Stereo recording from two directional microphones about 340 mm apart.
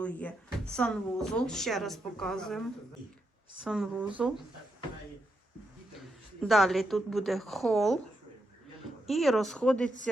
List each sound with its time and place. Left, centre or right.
0.0 s speech: centre
3.6 s speech: centre
6.0 s a woman's voice: centre
9.0 s speech: centre